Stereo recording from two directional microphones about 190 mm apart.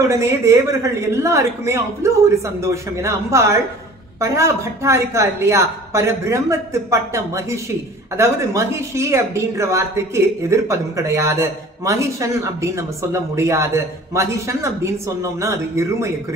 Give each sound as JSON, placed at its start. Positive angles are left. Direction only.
{"t": 0.1, "sound": "speech", "side_deg": -15}